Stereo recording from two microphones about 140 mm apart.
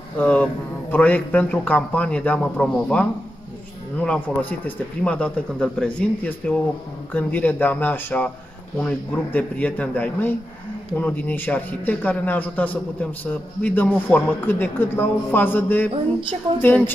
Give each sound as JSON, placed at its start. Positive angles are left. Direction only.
{"t": 0.2, "sound": "a man's voice", "side_deg": 10}
{"t": 15.9, "sound": "a sound", "side_deg": -35}
{"t": 16.6, "sound": "a man's voice", "side_deg": 15}